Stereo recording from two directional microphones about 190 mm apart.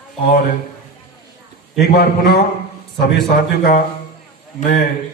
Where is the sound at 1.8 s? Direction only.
55° left (ahead or behind).